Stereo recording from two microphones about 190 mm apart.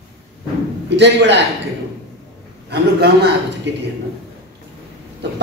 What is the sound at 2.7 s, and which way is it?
A man's voice, 60° right (ahead or behind).